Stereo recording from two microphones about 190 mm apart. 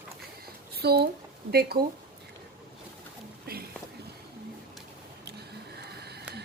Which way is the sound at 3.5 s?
50° right (ahead or behind).